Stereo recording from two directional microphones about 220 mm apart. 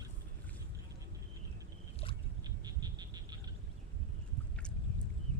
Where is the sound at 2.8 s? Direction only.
20° right (ahead or behind).